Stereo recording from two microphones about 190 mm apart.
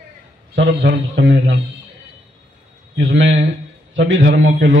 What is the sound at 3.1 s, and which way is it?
A man's voice, 80° right.